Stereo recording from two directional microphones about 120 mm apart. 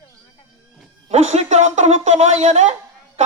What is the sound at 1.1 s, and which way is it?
A man's voice, 65° right (ahead or behind).